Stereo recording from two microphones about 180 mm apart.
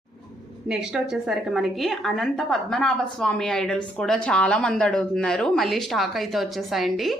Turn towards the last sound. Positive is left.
turn(degrees=0)  # may be behind; listen again after turning